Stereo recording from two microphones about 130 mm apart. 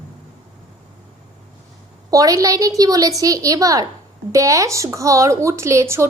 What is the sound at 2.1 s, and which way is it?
Speech, 25° right (ahead or behind).